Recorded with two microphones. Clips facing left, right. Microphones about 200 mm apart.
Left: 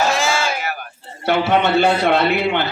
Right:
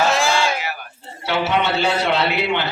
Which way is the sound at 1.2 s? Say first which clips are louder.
Left 4 dB; 55° left (ahead or behind).